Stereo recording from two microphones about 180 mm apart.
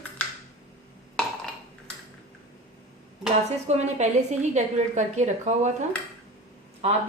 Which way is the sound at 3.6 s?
40° right (ahead or behind).